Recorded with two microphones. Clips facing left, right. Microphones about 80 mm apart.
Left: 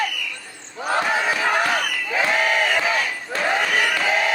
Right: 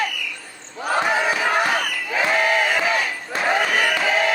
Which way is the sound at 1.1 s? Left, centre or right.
Centre.